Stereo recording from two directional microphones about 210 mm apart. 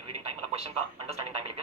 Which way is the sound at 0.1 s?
30° right (ahead or behind).